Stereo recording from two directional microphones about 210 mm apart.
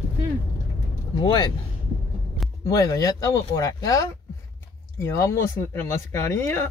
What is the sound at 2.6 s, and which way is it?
Speech, 15° left (ahead or behind).